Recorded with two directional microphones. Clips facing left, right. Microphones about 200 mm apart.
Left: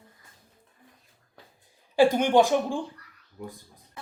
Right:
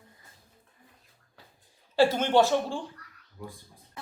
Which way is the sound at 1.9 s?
15° left (ahead or behind).